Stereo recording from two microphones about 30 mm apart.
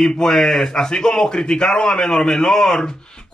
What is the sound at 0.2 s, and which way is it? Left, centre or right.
A man's voice, centre.